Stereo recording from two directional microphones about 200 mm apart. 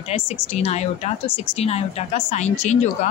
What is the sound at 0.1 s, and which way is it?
A woman's voice, 30° left (ahead or behind).